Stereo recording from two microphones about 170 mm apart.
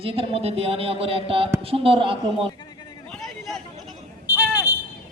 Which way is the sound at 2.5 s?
25° left (ahead or behind).